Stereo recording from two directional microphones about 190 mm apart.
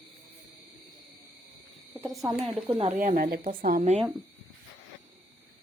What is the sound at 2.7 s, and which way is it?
Speech, 40° right (ahead or behind).